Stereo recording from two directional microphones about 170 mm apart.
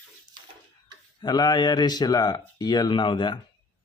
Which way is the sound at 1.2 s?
25° left (ahead or behind).